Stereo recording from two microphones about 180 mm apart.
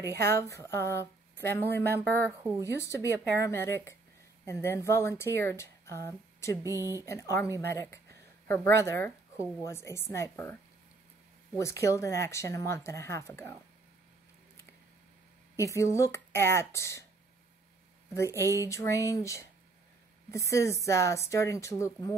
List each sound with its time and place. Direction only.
0.2 s speech: 15° left (ahead or behind)
2.2 s speech: 15° right (ahead or behind)
2.8 s speech: 15° left (ahead or behind)
6.7 s speech: 15° right (ahead or behind)
7.1 s speech: 15° left (ahead or behind)
11.5 s speech: 15° left (ahead or behind)
15.5 s speech: 15° left (ahead or behind)
18.1 s speech: 15° left (ahead or behind)